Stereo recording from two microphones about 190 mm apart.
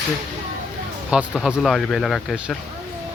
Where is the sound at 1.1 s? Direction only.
5° right (ahead or behind).